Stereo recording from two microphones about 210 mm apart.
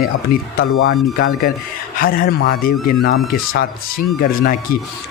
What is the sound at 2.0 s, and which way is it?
Speech, 45° left (ahead or behind).